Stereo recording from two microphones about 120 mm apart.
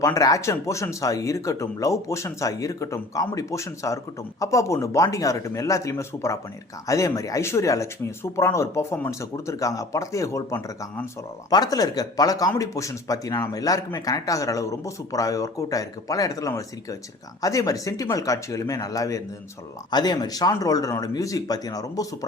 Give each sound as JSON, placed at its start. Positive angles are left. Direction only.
{"t": 0.0, "sound": "speech", "side_deg": 30}